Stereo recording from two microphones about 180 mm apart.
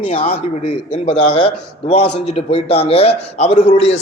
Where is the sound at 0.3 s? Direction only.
35° left (ahead or behind).